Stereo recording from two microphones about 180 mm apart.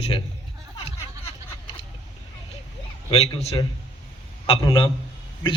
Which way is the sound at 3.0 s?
30° left (ahead or behind).